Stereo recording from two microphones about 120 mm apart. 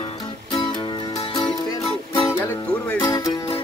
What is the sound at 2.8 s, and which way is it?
Music, 15° left (ahead or behind).